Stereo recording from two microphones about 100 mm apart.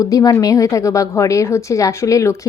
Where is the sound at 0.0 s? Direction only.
35° left (ahead or behind).